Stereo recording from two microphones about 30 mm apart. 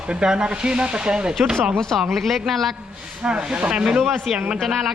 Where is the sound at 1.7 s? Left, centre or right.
Left.